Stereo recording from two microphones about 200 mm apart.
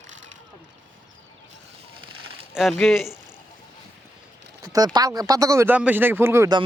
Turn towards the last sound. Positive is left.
turn(degrees=-15)  # may be behind; listen again after turning